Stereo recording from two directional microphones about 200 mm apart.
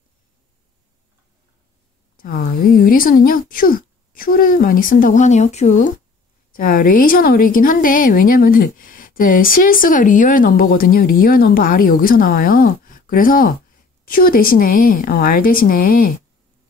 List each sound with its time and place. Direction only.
2.1 s speech: 45° left (ahead or behind)